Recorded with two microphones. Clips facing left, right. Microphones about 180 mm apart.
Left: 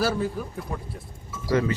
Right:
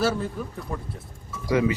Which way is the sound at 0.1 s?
5° left (ahead or behind).